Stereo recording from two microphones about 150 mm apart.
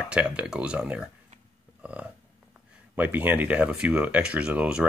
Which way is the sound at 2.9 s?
10° right (ahead or behind).